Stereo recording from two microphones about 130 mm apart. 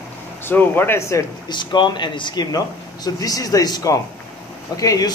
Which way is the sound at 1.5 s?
35° left (ahead or behind).